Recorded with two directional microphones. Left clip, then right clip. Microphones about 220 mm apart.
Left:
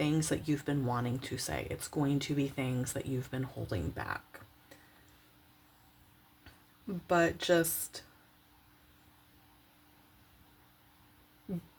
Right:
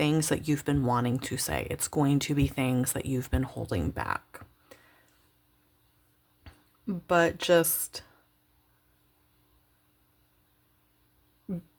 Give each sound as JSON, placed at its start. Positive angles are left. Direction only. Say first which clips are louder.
{"t": 0.0, "sound": "speech", "louder": "right 5 dB", "side_deg": -35}
{"t": 6.4, "sound": "speech", "louder": "right 7 dB", "side_deg": -35}